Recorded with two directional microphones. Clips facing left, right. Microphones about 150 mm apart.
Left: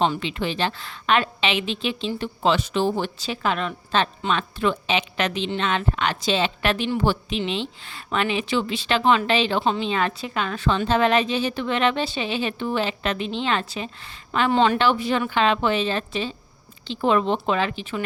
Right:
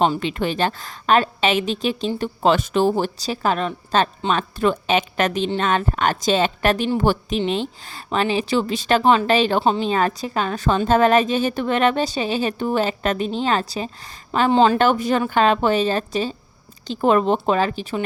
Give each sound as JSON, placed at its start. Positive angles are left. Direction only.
{"t": 0.0, "sound": "a woman's voice", "side_deg": -45}
{"t": 14.8, "sound": "a woman's voice", "side_deg": -45}